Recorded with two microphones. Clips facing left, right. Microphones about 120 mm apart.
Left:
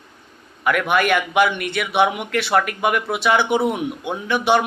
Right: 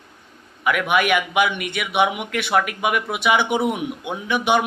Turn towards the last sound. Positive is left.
turn(degrees=-15)  # may be behind; listen again after turning